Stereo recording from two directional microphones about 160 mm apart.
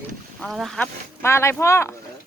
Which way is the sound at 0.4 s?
Centre (ahead or behind).